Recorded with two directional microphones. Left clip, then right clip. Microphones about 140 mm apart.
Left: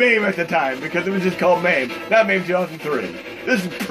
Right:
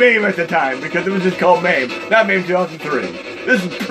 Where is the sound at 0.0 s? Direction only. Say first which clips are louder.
Right 4 dB; 20° right (ahead or behind).